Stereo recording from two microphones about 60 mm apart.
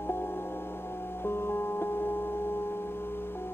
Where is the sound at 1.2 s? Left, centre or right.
Left.